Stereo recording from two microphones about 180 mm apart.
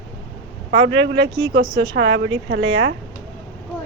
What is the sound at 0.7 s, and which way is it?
Speech, 90° right.